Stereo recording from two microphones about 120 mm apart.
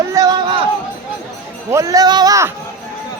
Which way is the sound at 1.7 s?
30° right (ahead or behind).